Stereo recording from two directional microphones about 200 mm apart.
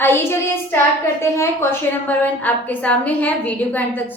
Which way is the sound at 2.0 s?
10° left (ahead or behind).